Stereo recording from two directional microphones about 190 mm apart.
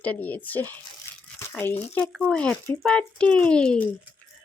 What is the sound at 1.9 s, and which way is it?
Speech, centre (ahead or behind).